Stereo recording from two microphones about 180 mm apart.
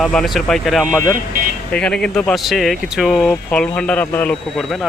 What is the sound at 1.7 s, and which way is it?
Speech, 5° left (ahead or behind).